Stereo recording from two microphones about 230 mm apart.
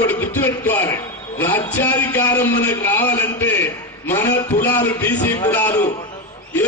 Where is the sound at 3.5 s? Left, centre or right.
Centre.